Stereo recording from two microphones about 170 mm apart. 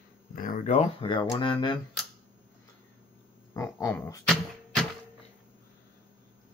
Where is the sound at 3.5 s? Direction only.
15° left (ahead or behind).